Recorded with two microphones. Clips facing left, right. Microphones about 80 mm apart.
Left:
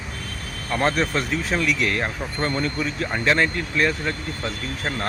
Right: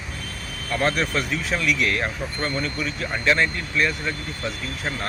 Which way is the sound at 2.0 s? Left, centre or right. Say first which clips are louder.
Left 1 dB; left.